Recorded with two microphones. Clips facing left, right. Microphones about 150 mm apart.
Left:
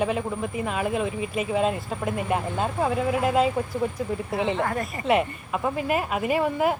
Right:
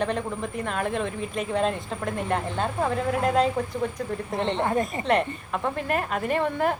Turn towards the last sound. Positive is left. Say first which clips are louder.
# left 2 dB
turn(degrees=5)  # may be behind; listen again after turning